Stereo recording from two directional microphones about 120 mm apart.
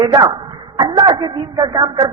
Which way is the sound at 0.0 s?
35° right (ahead or behind).